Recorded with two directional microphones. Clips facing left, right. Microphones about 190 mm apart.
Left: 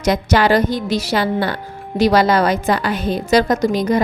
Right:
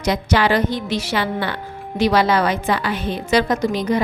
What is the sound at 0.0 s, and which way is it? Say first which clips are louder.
A woman's voice: left 3 dB; 45° left (ahead or behind).